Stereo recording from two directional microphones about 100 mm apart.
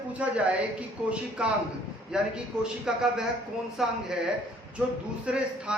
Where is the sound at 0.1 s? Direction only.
15° right (ahead or behind).